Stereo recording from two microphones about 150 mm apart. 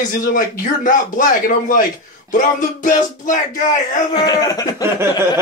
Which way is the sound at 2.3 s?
60° left (ahead or behind).